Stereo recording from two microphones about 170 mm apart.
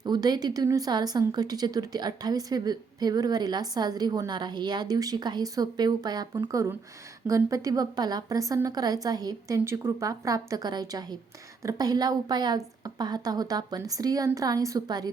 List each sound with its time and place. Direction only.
0.0 s a woman's voice: 25° right (ahead or behind)